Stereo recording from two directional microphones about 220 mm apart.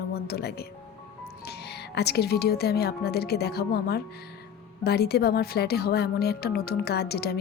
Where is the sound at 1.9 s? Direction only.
45° left (ahead or behind).